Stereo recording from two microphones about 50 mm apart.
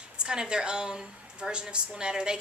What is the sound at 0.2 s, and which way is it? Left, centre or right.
A woman's voice, centre.